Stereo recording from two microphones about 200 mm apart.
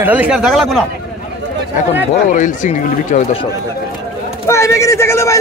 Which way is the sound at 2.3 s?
40° left (ahead or behind).